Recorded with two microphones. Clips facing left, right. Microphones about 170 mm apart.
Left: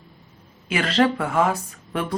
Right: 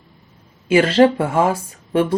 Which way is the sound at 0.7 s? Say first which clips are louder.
Right 8 dB; 25° right (ahead or behind).